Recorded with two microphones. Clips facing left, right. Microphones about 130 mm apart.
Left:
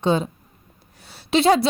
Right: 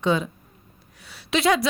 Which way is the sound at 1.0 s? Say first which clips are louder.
Left 4 dB; 30° left (ahead or behind).